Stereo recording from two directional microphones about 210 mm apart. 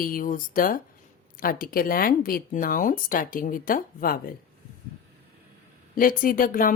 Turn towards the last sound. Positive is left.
turn(degrees=40)  # may be behind; listen again after turning